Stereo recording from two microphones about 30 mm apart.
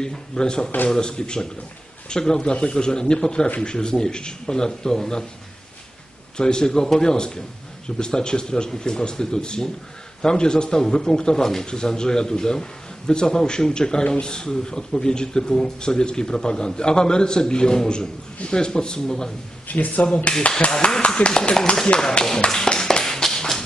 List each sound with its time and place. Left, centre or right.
0.0 s speech: left
6.3 s speech: left
19.7 s speech: left
20.5 s speech: left
21.0 s a sound: left
21.3 s speech: left
22.5 s tap: centre